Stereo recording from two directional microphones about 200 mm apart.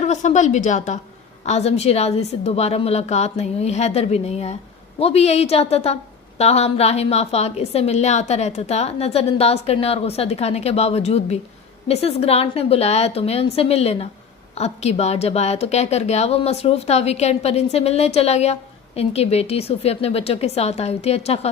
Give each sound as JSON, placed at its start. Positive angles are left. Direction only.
{"t": 0.0, "sound": "a woman's voice", "side_deg": 35}